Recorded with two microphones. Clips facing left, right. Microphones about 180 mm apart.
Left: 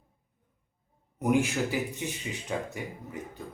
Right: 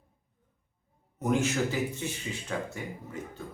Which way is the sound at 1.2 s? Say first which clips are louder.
Left 1 dB; 15° left (ahead or behind).